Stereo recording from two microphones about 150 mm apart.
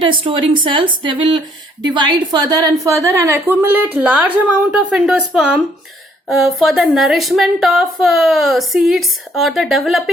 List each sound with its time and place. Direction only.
0.0 s a woman's voice: 35° right (ahead or behind); by 10.0 s centre (ahead or behind)